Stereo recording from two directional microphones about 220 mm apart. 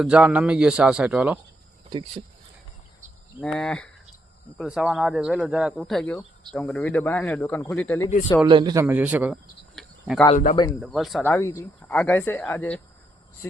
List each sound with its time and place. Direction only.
0.0 s speech: 5° right (ahead or behind)
1.9 s speech: 20° right (ahead or behind)
3.4 s speech: 5° left (ahead or behind)
8.4 s speech: 20° right (ahead or behind); by 10.2 s centre (ahead or behind)
10.2 s speech: 30° left (ahead or behind)
10.8 s speech: centre (ahead or behind)
11.2 s speech: 10° left (ahead or behind)